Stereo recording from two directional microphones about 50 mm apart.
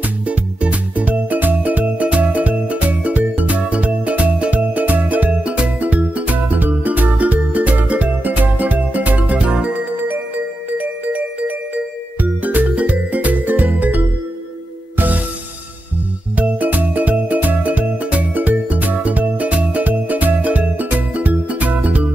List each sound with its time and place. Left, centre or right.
0.3 s music: right
10.8 s music: right
16.3 s music: right